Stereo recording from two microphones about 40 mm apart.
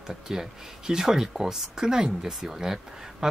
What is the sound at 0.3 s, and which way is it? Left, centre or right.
Speech, centre.